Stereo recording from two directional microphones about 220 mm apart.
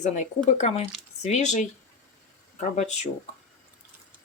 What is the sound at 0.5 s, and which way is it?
Speech, 30° left (ahead or behind).